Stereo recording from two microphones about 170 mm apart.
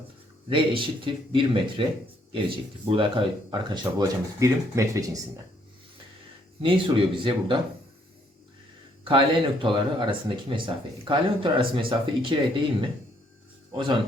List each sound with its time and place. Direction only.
0.4 s speech: 30° right (ahead or behind)
6.6 s speech: 30° right (ahead or behind)
9.0 s speech: 30° right (ahead or behind)
13.7 s speech: 30° right (ahead or behind)